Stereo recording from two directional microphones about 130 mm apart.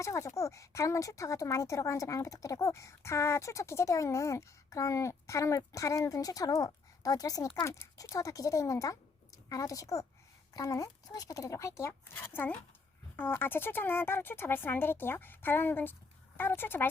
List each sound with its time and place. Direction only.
0.0 s speech: 25° left (ahead or behind)